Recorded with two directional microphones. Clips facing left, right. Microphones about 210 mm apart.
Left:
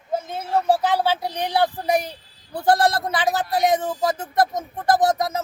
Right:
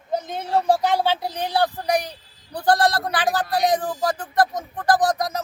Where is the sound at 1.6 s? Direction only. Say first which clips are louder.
Left 1 dB; 20° left (ahead or behind).